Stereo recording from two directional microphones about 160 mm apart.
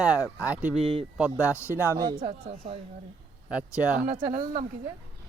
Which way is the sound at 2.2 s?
40° right (ahead or behind).